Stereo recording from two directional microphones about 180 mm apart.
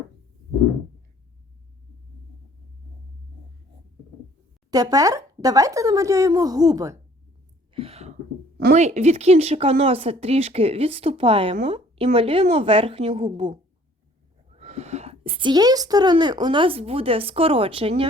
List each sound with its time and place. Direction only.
4.7 s speech: 20° right (ahead or behind)
7.7 s a sound: 30° right (ahead or behind)
8.7 s speech: 40° right (ahead or behind)